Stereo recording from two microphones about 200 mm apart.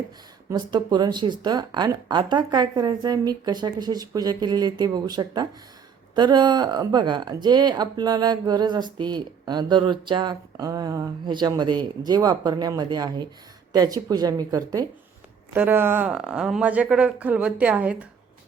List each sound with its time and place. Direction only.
0.5 s speech: 20° right (ahead or behind)